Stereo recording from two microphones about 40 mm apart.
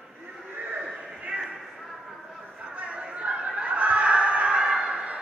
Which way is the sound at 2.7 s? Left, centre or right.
Right.